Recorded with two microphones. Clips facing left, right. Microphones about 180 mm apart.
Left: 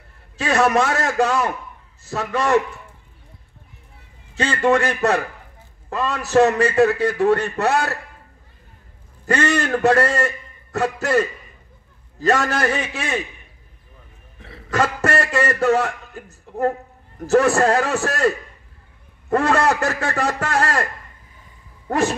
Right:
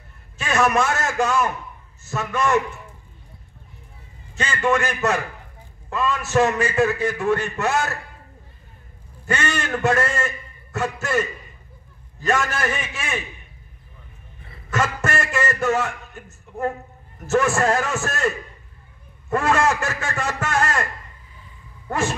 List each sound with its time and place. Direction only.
0.4 s a man's voice: 35° left (ahead or behind)
4.4 s a man's voice: 35° left (ahead or behind)
9.2 s a man's voice: 35° left (ahead or behind)
12.3 s a man's voice: 35° left (ahead or behind)
14.7 s a man's voice: 35° left (ahead or behind)
19.3 s a man's voice: 35° left (ahead or behind)